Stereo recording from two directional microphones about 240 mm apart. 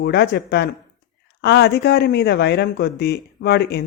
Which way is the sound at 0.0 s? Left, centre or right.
Left.